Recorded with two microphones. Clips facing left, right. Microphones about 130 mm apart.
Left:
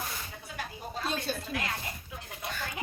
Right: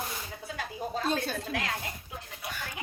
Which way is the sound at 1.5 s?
90° right.